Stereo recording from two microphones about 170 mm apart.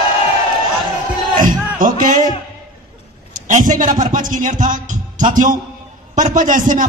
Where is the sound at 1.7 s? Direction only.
50° right (ahead or behind).